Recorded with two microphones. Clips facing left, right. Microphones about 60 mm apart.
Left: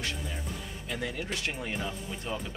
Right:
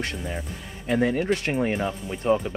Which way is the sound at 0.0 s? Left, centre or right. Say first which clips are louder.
Right 6 dB; right.